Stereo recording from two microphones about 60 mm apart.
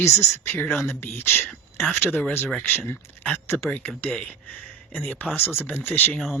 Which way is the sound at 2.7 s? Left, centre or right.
Left.